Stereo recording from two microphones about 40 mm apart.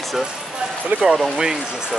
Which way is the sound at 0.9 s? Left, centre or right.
Right.